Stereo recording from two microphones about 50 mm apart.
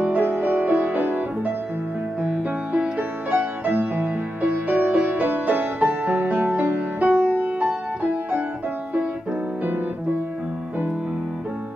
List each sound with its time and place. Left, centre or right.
0.0 s music: right